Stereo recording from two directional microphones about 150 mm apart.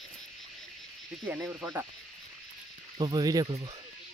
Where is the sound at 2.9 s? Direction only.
30° right (ahead or behind).